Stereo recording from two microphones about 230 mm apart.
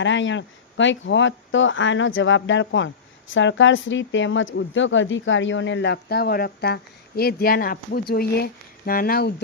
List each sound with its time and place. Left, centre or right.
0.0 s speech: left